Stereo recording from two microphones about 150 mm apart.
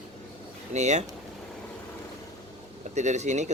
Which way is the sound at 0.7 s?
50° right (ahead or behind).